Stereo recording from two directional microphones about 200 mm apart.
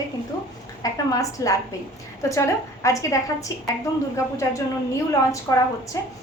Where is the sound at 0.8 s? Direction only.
15° left (ahead or behind).